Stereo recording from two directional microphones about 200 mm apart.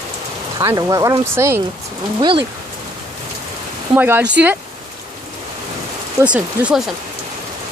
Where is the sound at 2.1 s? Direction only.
25° right (ahead or behind).